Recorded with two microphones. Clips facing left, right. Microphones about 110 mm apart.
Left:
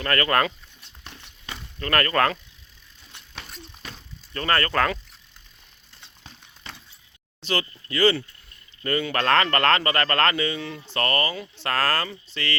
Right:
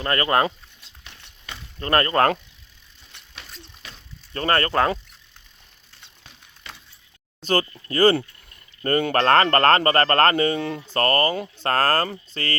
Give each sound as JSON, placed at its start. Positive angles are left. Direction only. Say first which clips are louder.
{"t": 0.0, "sound": "speech", "louder": "right 2 dB", "side_deg": -20}
{"t": 1.8, "sound": "speech", "louder": "right 3 dB", "side_deg": -30}
{"t": 4.4, "sound": "speech", "louder": "right 2 dB", "side_deg": -30}
{"t": 7.4, "sound": "speech", "louder": "right 5 dB", "side_deg": -45}